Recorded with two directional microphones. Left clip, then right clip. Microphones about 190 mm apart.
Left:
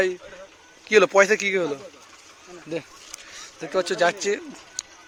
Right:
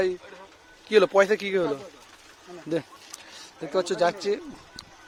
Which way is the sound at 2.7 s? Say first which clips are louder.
Right 2 dB; 30° right (ahead or behind).